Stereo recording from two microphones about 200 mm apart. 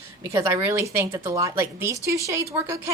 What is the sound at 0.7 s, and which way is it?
A woman's voice, 15° right (ahead or behind).